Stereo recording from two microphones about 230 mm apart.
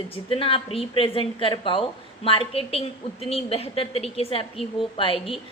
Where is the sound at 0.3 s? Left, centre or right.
Left.